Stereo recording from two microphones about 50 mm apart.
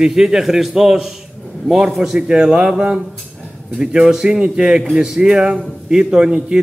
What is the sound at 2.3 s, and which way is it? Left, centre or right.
A man's voice, centre.